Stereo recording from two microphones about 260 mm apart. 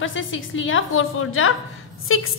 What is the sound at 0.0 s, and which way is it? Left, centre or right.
A woman's voice, left.